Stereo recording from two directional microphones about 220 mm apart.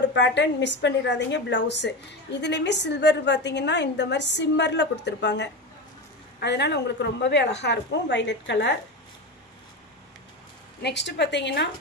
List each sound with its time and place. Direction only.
0.1 s a woman's voice: 55° left (ahead or behind)
10.8 s a woman's voice: 50° left (ahead or behind)